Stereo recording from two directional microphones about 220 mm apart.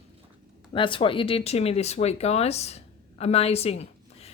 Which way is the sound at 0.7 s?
25° left (ahead or behind).